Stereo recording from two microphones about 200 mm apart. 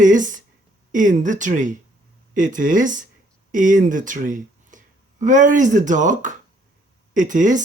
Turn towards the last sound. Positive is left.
turn(degrees=-40)  # may be behind; listen again after turning